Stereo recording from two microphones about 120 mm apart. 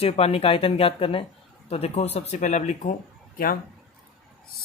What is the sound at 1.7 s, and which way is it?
Speech, 60° left (ahead or behind).